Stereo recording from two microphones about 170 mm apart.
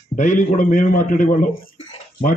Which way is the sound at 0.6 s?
50° left (ahead or behind).